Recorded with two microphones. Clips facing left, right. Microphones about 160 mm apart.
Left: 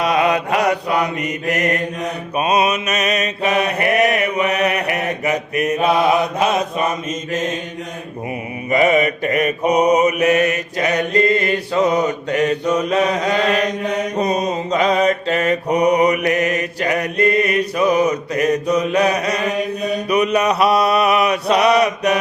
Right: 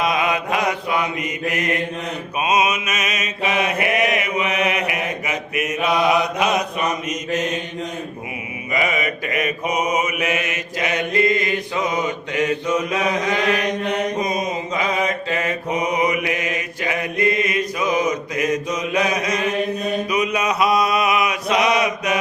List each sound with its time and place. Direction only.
0.0 s mantra: 35° left (ahead or behind)
8.7 s mantra: 40° left (ahead or behind)
14.2 s mantra: 35° left (ahead or behind)
16.0 s mantra: 45° left (ahead or behind)
20.3 s mantra: 35° left (ahead or behind)